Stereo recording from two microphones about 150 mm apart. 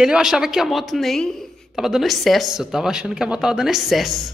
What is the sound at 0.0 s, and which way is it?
A woman's voice, 5° right (ahead or behind).